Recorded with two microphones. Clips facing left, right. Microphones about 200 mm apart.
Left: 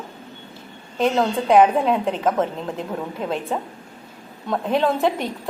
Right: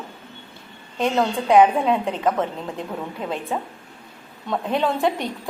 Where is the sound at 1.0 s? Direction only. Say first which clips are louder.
Left 2 dB; centre (ahead or behind).